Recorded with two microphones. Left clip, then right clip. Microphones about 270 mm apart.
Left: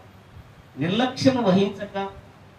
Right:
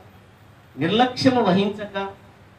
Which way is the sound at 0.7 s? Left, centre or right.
Centre.